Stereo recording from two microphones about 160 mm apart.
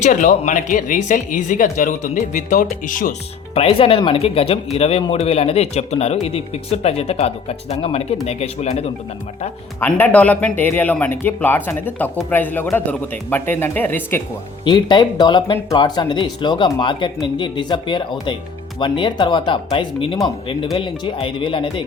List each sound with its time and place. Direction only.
0.0 s speech: 50° left (ahead or behind)
3.5 s speech: 35° left (ahead or behind)
9.8 s speech: 10° left (ahead or behind)
14.6 s speech: 30° left (ahead or behind)